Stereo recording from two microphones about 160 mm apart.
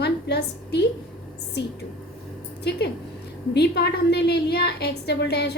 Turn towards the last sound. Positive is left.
turn(degrees=90)